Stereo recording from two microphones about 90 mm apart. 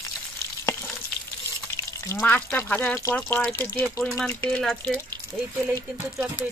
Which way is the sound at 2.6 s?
25° left (ahead or behind).